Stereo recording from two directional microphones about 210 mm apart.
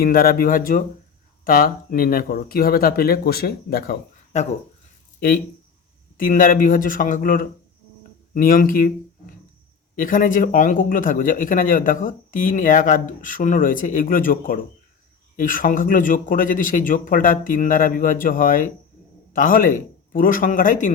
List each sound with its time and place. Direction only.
0.0 s speech: 45° left (ahead or behind)
6.1 s speech: 40° left (ahead or behind)